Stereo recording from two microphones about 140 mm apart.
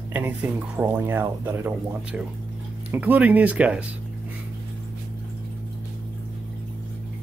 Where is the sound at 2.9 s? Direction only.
10° right (ahead or behind).